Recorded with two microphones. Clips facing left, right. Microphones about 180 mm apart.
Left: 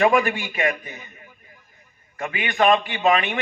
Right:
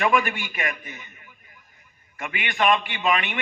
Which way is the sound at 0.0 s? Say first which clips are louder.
Left 4 dB; 35° left (ahead or behind).